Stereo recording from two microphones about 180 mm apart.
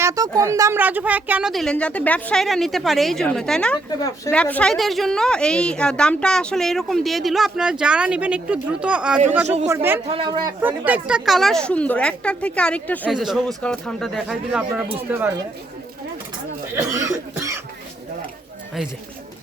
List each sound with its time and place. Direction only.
0.0 s a woman's voice: 20° right (ahead or behind)
10.1 s speech: 25° right (ahead or behind)
10.6 s a woman's voice: 10° right (ahead or behind)
16.7 s cough: 15° right (ahead or behind)